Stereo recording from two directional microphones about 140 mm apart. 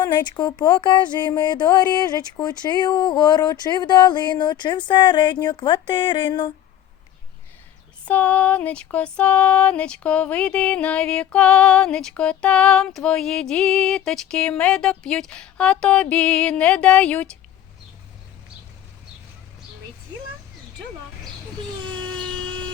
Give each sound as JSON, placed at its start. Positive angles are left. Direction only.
{"t": 0.0, "sound": "speech", "side_deg": 30}
{"t": 8.0, "sound": "music", "side_deg": 10}